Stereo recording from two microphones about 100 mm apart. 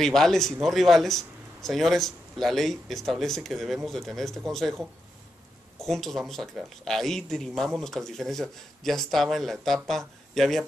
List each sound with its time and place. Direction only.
0.0 s speech: 5° left (ahead or behind)